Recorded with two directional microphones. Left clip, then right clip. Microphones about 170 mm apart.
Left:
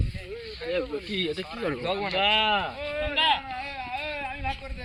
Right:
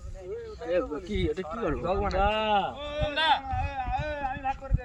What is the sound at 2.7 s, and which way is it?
Speech, 30° right (ahead or behind).